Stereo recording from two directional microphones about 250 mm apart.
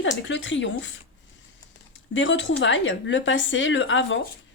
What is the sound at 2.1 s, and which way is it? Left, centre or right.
Speech, left.